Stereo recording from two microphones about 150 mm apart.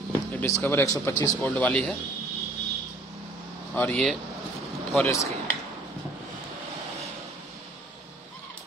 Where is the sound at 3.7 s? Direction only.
5° left (ahead or behind).